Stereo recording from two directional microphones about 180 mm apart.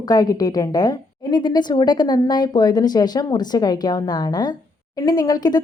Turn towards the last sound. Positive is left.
turn(degrees=20)  # may be behind; listen again after turning